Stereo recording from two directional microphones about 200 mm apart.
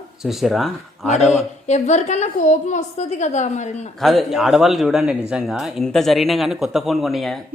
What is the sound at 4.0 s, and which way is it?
Speech, centre (ahead or behind).